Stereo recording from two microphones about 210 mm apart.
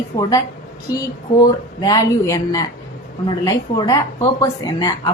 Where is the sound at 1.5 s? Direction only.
20° left (ahead or behind).